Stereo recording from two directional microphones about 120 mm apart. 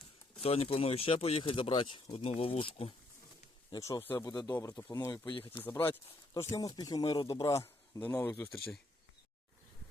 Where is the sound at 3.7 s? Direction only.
30° left (ahead or behind).